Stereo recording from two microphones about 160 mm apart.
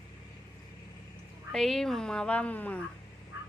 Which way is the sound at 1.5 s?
Centre (ahead or behind).